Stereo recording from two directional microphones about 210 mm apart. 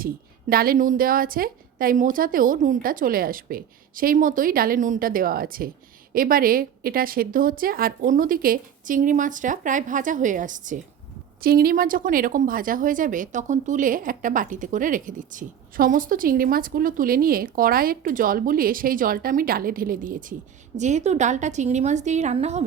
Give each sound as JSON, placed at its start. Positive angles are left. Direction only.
{"t": 0.5, "sound": "a woman's voice", "side_deg": -45}